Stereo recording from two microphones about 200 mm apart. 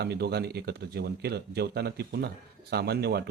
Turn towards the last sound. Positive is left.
turn(degrees=-55)  # may be behind; listen again after turning